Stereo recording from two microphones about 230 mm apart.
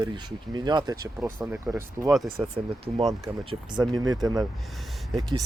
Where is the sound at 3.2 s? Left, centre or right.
Centre.